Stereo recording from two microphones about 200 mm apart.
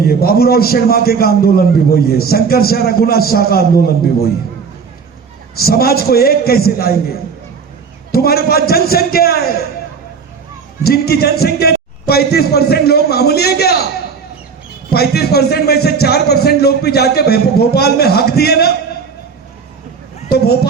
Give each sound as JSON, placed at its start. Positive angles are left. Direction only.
{"t": 0.0, "sound": "a man's voice", "side_deg": 50}
{"t": 5.5, "sound": "a man's voice", "side_deg": 50}
{"t": 8.1, "sound": "a man's voice", "side_deg": 50}
{"t": 10.8, "sound": "a man's voice", "side_deg": 50}
{"t": 14.9, "sound": "a man's voice", "side_deg": 55}